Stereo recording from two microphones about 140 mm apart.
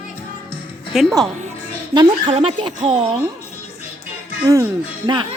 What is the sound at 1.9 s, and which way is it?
Speech, 35° right (ahead or behind).